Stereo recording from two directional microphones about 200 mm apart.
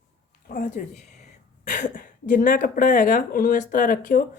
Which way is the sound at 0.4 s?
45° left (ahead or behind).